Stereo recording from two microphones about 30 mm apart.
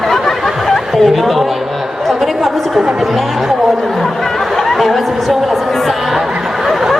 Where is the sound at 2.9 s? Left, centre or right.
Centre.